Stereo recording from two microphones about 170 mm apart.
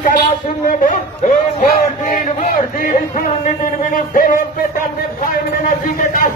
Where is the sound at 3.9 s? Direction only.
55° left (ahead or behind).